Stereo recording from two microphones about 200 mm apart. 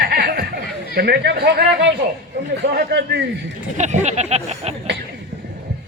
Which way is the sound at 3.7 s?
35° right (ahead or behind).